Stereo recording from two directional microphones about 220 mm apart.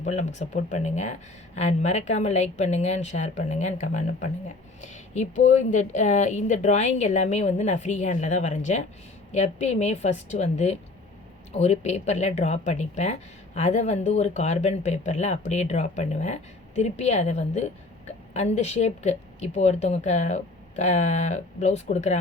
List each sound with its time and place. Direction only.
0.0 s speech: 30° left (ahead or behind)